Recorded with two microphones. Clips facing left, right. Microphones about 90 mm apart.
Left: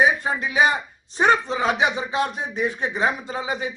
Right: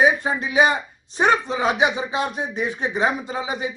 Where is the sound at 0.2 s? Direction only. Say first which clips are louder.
Right 1 dB; 20° right (ahead or behind).